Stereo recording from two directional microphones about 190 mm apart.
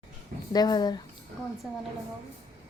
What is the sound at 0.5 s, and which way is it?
Speech, 20° left (ahead or behind).